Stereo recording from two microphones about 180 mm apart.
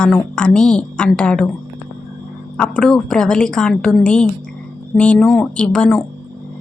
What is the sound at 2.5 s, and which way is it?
A woman's voice, 5° left (ahead or behind).